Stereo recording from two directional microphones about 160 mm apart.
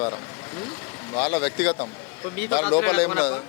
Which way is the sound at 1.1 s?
10° left (ahead or behind).